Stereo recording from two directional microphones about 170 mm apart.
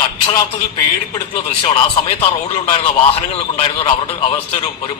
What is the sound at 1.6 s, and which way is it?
Speech, 35° left (ahead or behind).